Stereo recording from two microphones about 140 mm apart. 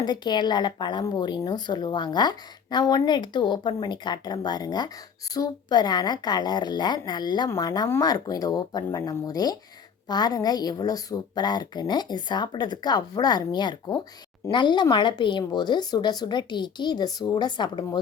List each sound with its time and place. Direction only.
0.0 s speech: 30° left (ahead or behind)